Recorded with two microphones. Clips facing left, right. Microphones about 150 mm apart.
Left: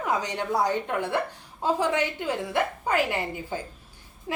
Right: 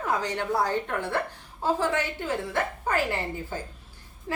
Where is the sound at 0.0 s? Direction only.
15° left (ahead or behind).